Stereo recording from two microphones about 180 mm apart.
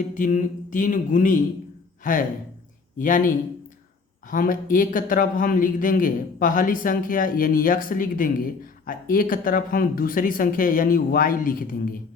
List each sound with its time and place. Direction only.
0.1 s a man's voice: 45° left (ahead or behind)
3.0 s a man's voice: 45° left (ahead or behind)